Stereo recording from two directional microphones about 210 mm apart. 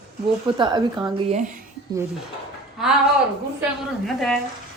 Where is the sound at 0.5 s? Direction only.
20° right (ahead or behind).